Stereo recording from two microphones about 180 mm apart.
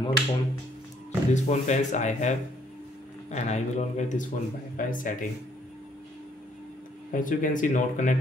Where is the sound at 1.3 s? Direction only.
40° left (ahead or behind).